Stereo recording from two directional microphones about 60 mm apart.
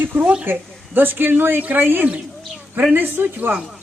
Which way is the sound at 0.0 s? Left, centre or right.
Right.